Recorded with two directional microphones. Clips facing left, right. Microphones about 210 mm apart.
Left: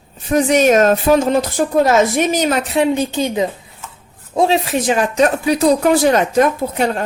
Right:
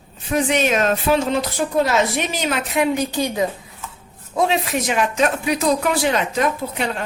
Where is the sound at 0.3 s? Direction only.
40° left (ahead or behind).